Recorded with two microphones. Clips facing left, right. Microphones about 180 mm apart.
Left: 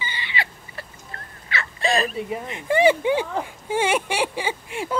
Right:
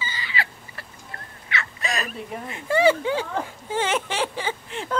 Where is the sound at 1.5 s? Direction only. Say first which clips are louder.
Left 6 dB; 30° left (ahead or behind).